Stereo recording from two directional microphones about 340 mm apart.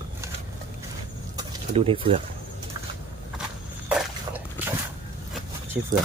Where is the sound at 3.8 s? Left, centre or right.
Centre.